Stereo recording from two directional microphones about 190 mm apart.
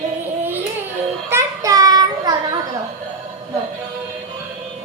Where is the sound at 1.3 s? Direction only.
20° right (ahead or behind).